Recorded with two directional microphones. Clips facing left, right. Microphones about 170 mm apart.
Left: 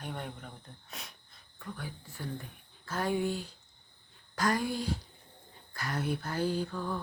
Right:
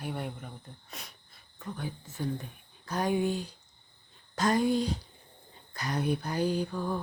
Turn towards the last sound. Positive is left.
turn(degrees=-15)  # may be behind; listen again after turning